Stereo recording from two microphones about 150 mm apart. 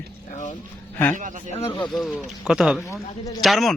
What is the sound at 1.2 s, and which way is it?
Speech, 55° right (ahead or behind).